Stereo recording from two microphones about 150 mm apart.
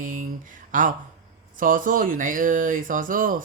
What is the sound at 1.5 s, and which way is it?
Mantra, 65° right (ahead or behind).